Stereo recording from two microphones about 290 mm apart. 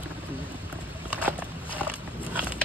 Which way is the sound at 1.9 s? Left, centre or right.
Centre.